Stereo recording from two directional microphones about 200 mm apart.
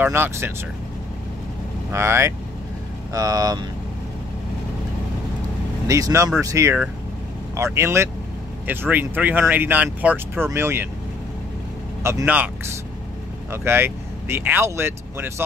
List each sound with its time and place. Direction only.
0.0 s speech: 10° right (ahead or behind)
1.9 s speech: 15° right (ahead or behind)
5.9 s speech: 15° right (ahead or behind)
12.0 s speech: 15° right (ahead or behind)
13.5 s speech: 10° right (ahead or behind)